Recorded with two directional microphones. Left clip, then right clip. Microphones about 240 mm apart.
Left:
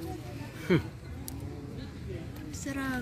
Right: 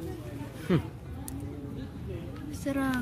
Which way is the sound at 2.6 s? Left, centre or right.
Right.